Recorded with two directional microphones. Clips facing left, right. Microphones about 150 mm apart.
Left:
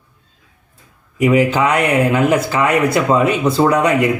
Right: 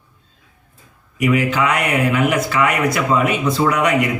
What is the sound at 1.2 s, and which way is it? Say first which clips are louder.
Speech: left 4 dB; 30° left (ahead or behind).